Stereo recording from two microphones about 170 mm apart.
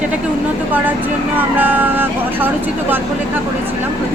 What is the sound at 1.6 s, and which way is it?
A woman's voice, 10° right (ahead or behind).